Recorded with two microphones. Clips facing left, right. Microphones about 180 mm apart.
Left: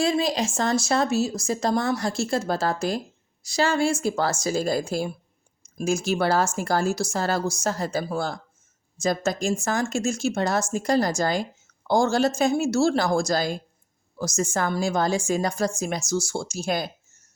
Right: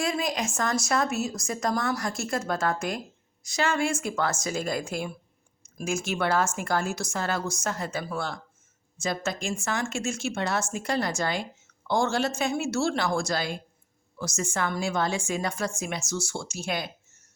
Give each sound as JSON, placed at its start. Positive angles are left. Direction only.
{"t": 0.0, "sound": "a woman's voice", "side_deg": 30}